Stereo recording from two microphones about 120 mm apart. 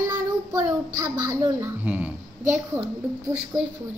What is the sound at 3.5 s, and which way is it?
Speech, 35° right (ahead or behind).